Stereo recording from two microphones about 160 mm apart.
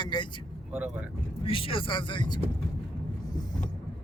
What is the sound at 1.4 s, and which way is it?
Speech, 35° left (ahead or behind).